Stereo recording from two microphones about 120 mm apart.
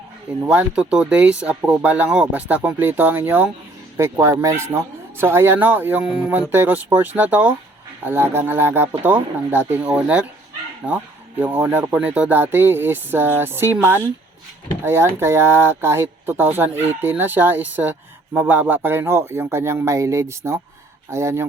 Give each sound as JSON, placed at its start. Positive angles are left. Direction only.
{"t": 0.4, "sound": "a man's voice", "side_deg": -10}